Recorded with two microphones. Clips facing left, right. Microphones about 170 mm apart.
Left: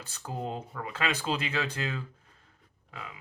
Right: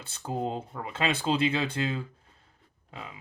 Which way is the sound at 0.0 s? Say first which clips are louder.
Right 4 dB; 30° right (ahead or behind).